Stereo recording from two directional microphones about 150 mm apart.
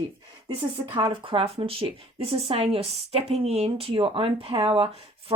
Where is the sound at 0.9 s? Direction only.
35° right (ahead or behind).